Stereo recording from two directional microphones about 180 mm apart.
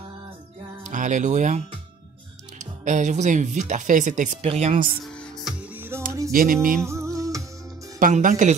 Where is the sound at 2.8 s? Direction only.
45° right (ahead or behind).